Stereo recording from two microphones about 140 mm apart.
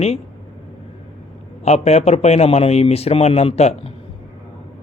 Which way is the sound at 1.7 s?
50° left (ahead or behind).